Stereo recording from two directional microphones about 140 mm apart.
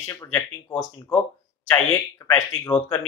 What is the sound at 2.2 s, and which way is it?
Speech, 20° left (ahead or behind).